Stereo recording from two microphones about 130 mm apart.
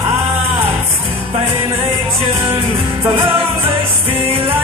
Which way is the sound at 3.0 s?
15° right (ahead or behind).